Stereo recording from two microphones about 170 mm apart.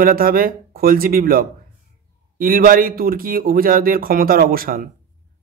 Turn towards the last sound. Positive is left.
turn(degrees=-60)  # may be behind; listen again after turning